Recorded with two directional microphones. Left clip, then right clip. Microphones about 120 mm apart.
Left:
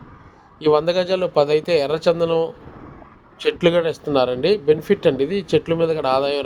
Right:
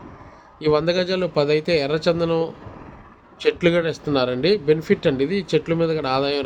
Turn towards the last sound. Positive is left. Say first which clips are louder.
# left 2 dB
turn(degrees=40)  # may be behind; listen again after turning